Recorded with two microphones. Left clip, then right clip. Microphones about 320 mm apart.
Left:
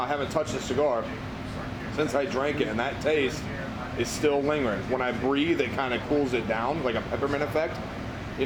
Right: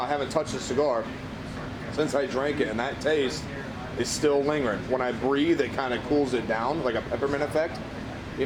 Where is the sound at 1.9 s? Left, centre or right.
Centre.